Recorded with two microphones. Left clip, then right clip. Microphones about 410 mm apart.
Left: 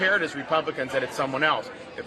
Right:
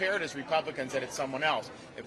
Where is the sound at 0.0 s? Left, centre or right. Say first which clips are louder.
Left 8 dB; right.